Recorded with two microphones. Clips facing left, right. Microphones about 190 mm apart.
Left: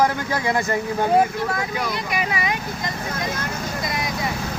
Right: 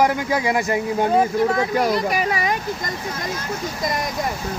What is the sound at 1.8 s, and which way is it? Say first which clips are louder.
Speech: right 6 dB; 35° right (ahead or behind).